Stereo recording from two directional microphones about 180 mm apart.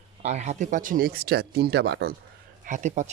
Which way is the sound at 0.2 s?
40° right (ahead or behind).